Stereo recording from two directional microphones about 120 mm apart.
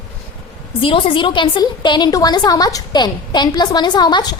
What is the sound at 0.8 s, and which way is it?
A woman's voice, 45° left (ahead or behind).